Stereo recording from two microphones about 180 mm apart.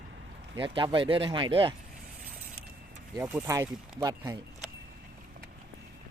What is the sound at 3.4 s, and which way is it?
Speech, 15° right (ahead or behind).